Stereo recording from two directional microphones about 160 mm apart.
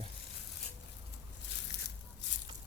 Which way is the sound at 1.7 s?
90° left.